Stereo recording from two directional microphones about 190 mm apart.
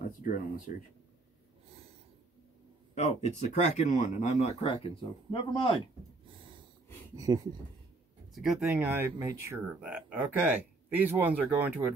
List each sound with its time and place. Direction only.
0.0 s speech: 45° left (ahead or behind)
2.9 s speech: 35° left (ahead or behind)
7.2 s speech: 20° right (ahead or behind)
8.4 s speech: 5° right (ahead or behind)